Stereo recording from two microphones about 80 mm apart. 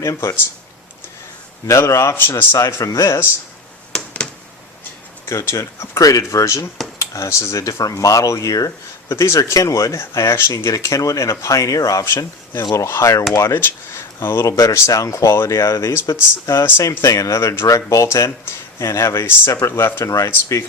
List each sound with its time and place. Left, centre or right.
0.0 s speech: left
1.6 s speech: left
3.9 s a sound: centre
5.3 s speech: left
9.0 s speech: left
14.4 s speech: left